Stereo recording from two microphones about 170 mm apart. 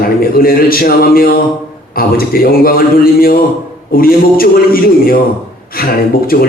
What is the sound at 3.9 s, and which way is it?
A man's voice, 60° left (ahead or behind).